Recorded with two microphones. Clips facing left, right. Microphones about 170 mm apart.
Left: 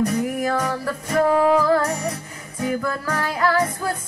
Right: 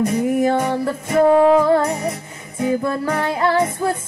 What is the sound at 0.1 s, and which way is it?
Music, 25° right (ahead or behind).